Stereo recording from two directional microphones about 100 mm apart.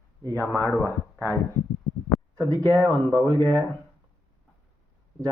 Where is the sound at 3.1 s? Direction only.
30° right (ahead or behind).